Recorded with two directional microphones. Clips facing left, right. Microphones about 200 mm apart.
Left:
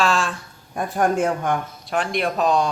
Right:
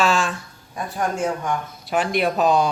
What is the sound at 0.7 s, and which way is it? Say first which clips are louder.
Speech: left 5 dB; 55° left (ahead or behind).